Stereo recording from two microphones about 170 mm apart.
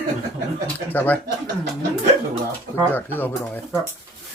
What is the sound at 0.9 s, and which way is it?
Speech, 10° left (ahead or behind).